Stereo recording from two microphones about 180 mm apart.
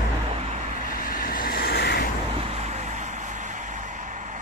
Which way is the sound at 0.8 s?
50° left (ahead or behind).